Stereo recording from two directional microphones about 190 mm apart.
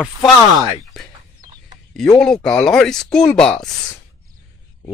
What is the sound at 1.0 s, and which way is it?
Speech, centre (ahead or behind).